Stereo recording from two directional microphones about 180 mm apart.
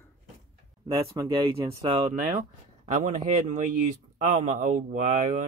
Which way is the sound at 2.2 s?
45° right (ahead or behind).